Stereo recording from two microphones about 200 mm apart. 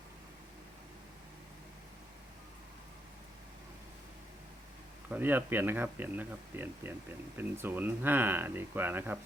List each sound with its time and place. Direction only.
5.0 s speech: 10° right (ahead or behind)